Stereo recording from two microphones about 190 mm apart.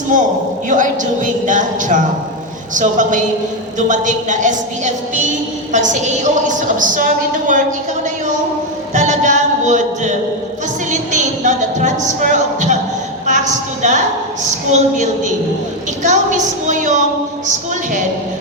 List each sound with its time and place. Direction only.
0.1 s a man's voice: 40° right (ahead or behind)
8.9 s music: 40° right (ahead or behind)
10.9 s a sound: 40° right (ahead or behind)
14.7 s a woman's voice: 40° right (ahead or behind)